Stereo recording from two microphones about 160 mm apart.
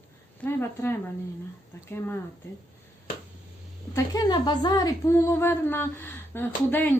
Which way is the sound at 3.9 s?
25° left (ahead or behind).